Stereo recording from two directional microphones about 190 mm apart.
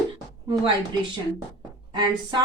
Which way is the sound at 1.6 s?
20° right (ahead or behind).